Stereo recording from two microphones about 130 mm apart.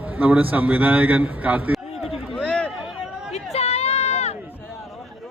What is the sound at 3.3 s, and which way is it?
Run, 55° left (ahead or behind).